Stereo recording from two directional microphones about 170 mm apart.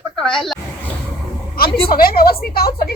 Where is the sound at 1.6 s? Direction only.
30° left (ahead or behind).